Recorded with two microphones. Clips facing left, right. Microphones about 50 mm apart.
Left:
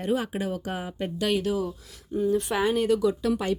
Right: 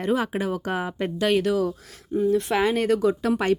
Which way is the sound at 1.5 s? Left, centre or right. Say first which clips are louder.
Right 4 dB; right.